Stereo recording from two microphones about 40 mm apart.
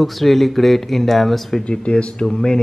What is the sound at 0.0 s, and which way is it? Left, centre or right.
Speech, centre.